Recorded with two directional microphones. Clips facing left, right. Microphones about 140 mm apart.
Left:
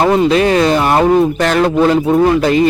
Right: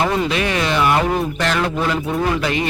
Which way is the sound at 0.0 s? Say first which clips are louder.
Left 8 dB; 35° left (ahead or behind).